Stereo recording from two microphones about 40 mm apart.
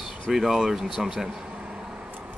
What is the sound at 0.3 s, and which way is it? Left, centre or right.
Speech, centre.